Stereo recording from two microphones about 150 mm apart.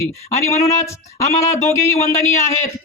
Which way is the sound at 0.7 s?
20° left (ahead or behind).